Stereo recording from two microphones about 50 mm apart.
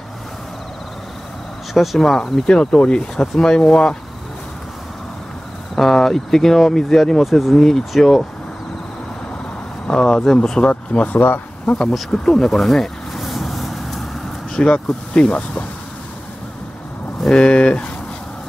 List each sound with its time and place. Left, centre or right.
1.7 s speech: centre
2.4 s speech: centre
5.8 s speech: centre
9.8 s speech: centre
10.7 s speech: left
11.1 s speech: left
12.1 s vehicle: centre
14.5 s speech: centre
17.3 s speech: centre